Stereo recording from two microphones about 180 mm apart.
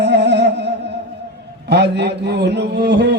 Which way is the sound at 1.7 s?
70° right (ahead or behind).